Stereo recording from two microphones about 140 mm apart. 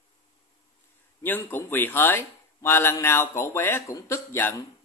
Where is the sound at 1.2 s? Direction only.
15° left (ahead or behind).